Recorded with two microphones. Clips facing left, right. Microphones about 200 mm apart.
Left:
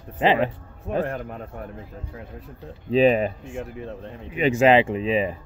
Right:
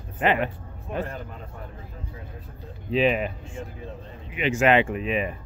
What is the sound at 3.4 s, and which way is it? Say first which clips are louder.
Speech: left 4 dB; 70° left (ahead or behind).